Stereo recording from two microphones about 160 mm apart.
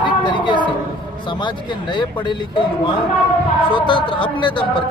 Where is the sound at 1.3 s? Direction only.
30° left (ahead or behind).